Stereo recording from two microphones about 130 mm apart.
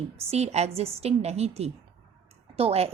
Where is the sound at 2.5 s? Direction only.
50° right (ahead or behind).